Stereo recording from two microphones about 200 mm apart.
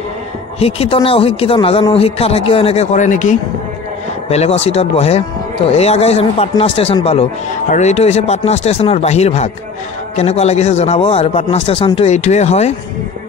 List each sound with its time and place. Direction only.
0.6 s speech: 30° left (ahead or behind)